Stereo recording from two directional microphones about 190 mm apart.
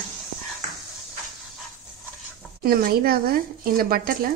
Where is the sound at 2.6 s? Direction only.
50° right (ahead or behind).